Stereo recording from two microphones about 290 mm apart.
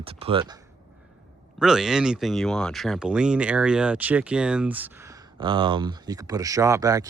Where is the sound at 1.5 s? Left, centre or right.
Centre.